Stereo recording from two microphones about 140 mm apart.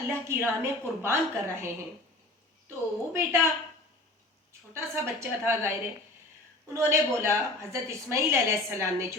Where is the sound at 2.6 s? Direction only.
20° right (ahead or behind).